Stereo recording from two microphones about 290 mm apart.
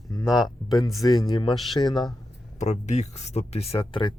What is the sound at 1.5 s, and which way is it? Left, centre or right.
Speech, centre.